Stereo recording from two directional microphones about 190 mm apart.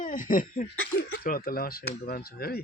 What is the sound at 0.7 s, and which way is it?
Speech, 90° left.